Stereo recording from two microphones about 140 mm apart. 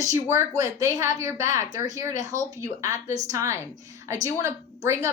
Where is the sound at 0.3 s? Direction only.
20° right (ahead or behind).